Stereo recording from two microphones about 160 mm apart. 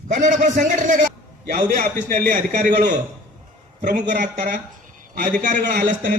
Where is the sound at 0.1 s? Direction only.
50° right (ahead or behind).